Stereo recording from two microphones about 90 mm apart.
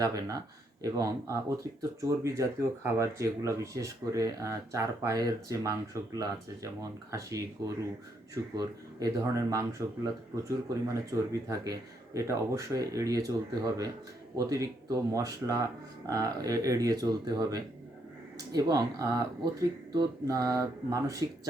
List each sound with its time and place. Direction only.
0.0 s speech: 45° right (ahead or behind)
8.5 s speech: 40° right (ahead or behind)
10.8 s speech: 35° right (ahead or behind)